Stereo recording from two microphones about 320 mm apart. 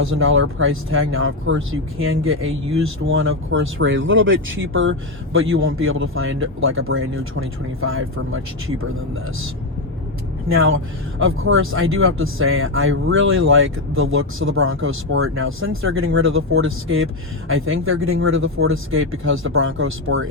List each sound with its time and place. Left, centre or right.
0.0 s speech: right
10.5 s speech: right